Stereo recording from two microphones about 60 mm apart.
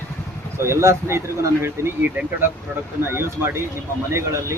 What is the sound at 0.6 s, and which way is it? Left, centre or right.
Speech, right.